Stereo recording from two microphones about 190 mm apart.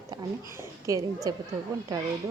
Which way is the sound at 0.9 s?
15° right (ahead or behind).